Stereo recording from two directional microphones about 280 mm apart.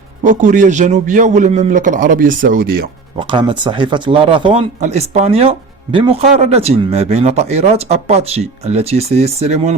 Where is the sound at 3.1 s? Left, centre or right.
Centre.